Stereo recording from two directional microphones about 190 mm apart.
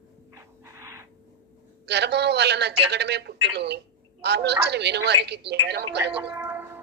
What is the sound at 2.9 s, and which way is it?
A woman's voice, 60° right (ahead or behind).